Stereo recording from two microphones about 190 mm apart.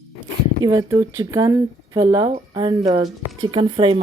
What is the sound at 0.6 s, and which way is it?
Speech, 20° right (ahead or behind).